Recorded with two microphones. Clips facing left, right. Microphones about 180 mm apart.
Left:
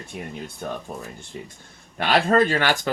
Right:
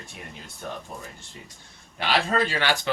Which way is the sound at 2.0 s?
50° left (ahead or behind).